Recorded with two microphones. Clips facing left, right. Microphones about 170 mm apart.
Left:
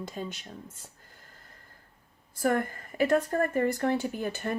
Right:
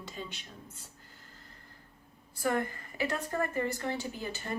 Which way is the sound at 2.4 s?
50° left (ahead or behind).